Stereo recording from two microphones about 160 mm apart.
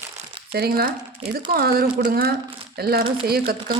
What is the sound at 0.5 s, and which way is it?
Speech, 75° right (ahead or behind).